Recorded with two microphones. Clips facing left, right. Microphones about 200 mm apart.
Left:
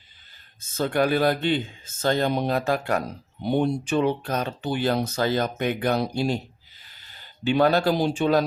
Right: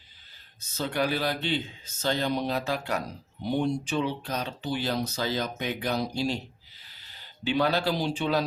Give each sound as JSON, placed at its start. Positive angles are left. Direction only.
{"t": 0.6, "sound": "speech", "side_deg": 50}